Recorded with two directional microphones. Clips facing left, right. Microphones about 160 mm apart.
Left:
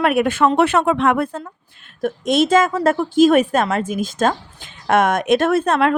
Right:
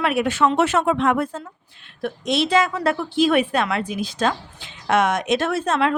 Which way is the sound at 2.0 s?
50° left (ahead or behind).